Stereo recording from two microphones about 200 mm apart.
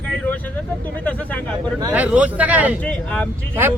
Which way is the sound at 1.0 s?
5° left (ahead or behind).